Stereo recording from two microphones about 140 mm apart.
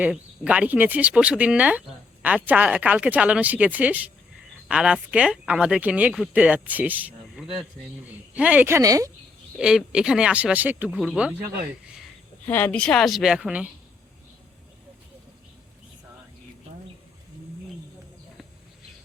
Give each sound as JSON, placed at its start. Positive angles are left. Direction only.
{"t": 0.0, "sound": "a woman's voice", "side_deg": -10}
{"t": 9.6, "sound": "speech", "side_deg": -5}
{"t": 12.5, "sound": "speech", "side_deg": 15}